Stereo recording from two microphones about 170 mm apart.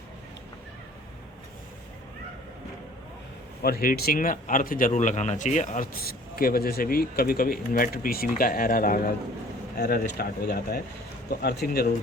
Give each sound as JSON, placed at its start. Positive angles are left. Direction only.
{"t": 3.6, "sound": "a man's voice", "side_deg": 60}